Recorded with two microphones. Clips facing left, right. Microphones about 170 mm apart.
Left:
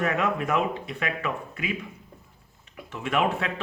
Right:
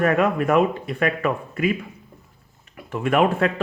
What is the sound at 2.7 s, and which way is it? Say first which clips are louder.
Speech: right 7 dB; 50° right (ahead or behind).